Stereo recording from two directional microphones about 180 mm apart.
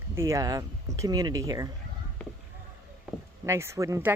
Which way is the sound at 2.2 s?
5° left (ahead or behind).